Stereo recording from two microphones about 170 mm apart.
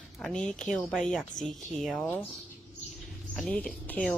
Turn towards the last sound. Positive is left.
turn(degrees=5)  # may be behind; listen again after turning